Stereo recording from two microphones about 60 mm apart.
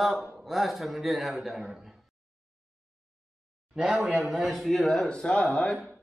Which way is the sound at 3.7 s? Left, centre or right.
Centre.